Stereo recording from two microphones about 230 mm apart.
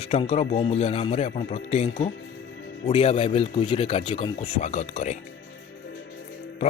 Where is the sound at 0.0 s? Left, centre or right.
Left.